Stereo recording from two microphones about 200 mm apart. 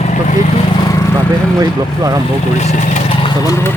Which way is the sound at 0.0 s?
35° left (ahead or behind).